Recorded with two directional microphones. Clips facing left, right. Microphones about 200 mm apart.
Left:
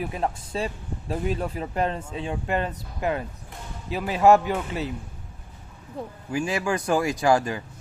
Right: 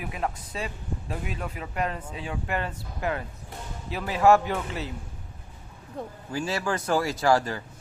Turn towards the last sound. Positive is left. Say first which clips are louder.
# left 2 dB
turn(degrees=15)  # may be behind; listen again after turning